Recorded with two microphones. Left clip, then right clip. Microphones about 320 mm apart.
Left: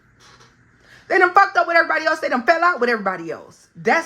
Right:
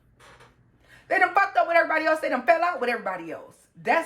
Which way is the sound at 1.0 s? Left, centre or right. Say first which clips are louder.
Left 7 dB; left.